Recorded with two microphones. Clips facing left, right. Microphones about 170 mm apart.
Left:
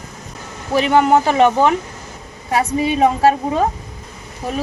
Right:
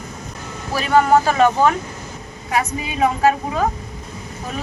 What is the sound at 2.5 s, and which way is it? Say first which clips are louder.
A woman's voice: left 4 dB; 30° left (ahead or behind).